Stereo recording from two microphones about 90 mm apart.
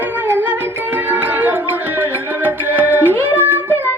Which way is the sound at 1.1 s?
20° right (ahead or behind).